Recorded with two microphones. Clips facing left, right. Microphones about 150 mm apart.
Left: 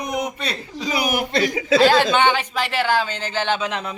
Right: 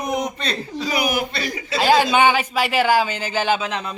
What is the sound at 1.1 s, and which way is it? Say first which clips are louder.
Speech: left 3 dB; 75° left (ahead or behind).